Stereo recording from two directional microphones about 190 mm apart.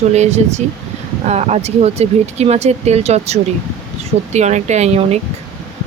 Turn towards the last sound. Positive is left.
turn(degrees=-35)  # may be behind; listen again after turning